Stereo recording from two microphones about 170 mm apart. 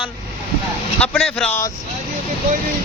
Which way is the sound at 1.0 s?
5° left (ahead or behind).